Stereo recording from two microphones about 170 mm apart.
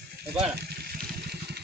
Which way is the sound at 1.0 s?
70° right (ahead or behind).